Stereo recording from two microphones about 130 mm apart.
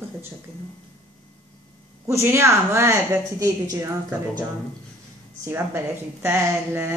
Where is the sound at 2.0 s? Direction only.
20° right (ahead or behind).